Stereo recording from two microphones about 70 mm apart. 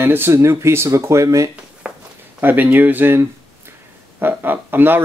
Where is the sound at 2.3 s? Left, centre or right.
Right.